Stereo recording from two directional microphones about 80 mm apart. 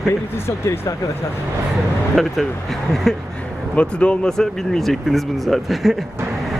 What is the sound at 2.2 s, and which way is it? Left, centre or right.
Speech, centre.